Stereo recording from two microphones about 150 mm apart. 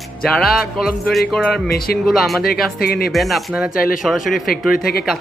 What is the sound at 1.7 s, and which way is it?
Speech, 90° left.